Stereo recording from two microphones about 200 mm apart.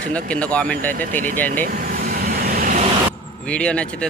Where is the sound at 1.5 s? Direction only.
45° right (ahead or behind).